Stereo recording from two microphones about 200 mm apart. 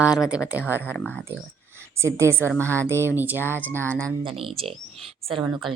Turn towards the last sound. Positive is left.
turn(degrees=-25)  # may be behind; listen again after turning